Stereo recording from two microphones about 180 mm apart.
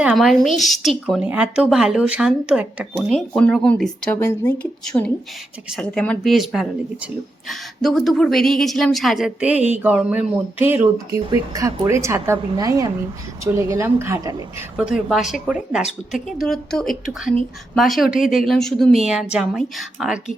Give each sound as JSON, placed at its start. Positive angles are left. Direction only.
{"t": 0.0, "sound": "a woman's voice", "side_deg": 0}